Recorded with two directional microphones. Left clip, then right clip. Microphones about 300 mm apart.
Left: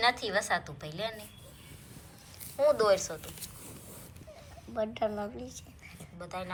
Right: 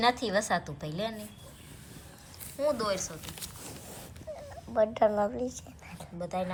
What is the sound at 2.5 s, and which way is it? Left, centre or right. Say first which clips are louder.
Speech: left 5 dB; centre.